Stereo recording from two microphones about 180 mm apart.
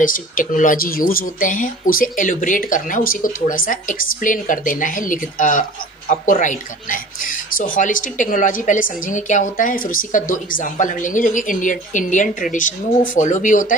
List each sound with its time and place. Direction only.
0.0 s speech: 50° left (ahead or behind)